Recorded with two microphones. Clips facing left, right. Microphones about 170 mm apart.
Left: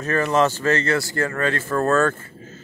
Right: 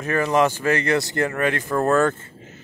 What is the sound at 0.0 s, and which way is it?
Speech, 15° right (ahead or behind).